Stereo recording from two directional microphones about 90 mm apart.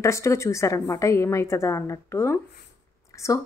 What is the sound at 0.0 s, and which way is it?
A woman's voice, 35° left (ahead or behind).